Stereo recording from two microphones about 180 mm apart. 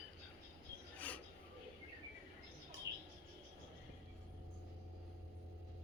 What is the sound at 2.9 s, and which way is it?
Bird, 15° right (ahead or behind).